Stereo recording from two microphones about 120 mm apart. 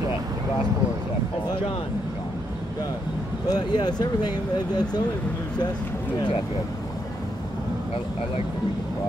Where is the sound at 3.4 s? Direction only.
35° left (ahead or behind).